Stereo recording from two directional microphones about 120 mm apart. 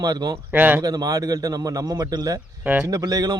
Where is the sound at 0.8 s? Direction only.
30° right (ahead or behind).